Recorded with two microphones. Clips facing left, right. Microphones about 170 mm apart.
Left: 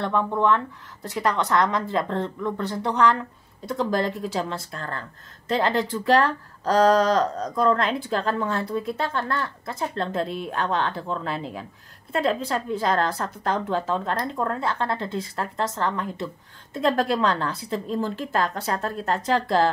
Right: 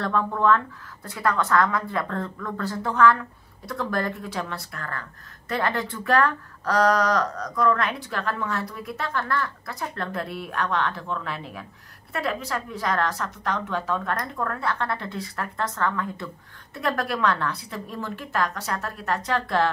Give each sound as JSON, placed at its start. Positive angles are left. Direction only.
{"t": 0.0, "sound": "speech", "side_deg": 15}